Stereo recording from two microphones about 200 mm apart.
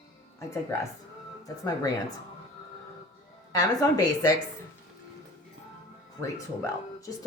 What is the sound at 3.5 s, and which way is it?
Speech, 15° left (ahead or behind).